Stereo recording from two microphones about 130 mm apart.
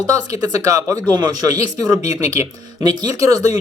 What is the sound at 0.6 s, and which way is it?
Speech, 25° right (ahead or behind).